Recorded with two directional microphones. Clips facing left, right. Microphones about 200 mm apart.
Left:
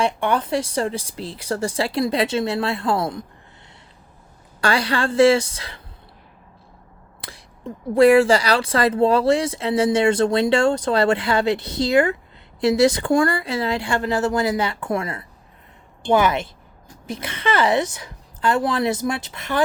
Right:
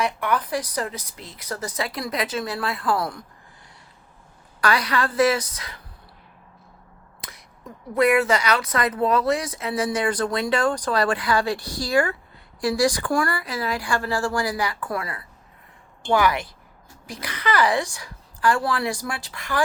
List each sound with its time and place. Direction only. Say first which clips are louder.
0.0 s speech: left 3 dB; 30° left (ahead or behind)
4.6 s speech: left 2 dB; 30° left (ahead or behind)
7.2 s speech: left 5 dB; 30° left (ahead or behind)